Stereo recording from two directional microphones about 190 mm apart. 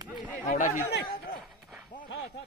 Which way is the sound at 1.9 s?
50° left (ahead or behind).